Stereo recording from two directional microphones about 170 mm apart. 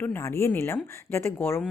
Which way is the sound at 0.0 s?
15° left (ahead or behind).